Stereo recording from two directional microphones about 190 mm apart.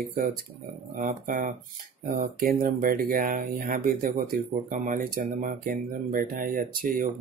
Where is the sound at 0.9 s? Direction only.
45° right (ahead or behind).